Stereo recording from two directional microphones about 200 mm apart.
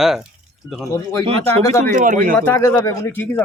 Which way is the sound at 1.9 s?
40° right (ahead or behind).